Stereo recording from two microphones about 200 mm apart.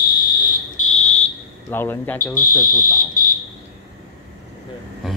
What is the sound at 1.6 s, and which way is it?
Speech, 10° left (ahead or behind).